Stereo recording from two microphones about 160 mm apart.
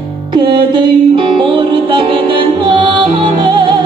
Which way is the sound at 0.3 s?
30° right (ahead or behind).